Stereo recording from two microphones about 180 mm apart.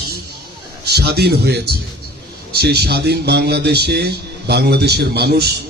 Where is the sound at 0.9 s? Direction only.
60° right (ahead or behind).